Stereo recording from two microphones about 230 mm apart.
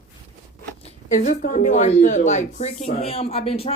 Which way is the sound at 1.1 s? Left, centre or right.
Left.